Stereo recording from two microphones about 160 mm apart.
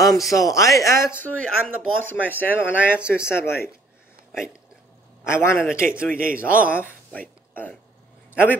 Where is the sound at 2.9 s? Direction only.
5° right (ahead or behind).